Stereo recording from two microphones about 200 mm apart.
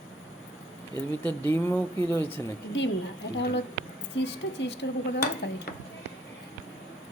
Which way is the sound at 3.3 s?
60° left (ahead or behind).